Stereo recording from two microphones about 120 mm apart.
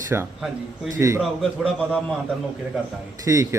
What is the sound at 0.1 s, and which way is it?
A man's voice, 20° right (ahead or behind).